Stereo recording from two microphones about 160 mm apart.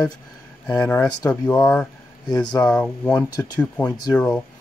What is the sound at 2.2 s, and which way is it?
Speech, 25° left (ahead or behind).